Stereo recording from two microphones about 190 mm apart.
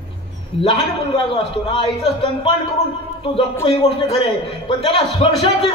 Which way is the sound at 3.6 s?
30° left (ahead or behind).